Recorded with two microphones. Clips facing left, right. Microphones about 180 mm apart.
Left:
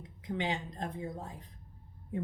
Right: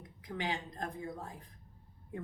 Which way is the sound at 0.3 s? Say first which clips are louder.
Left 3 dB; 25° left (ahead or behind).